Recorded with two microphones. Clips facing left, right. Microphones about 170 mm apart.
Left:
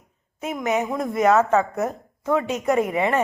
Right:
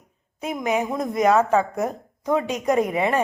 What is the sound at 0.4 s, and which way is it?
Speech, 15° right (ahead or behind).